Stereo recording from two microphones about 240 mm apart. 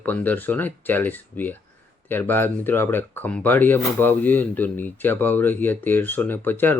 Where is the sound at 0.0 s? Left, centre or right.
Centre.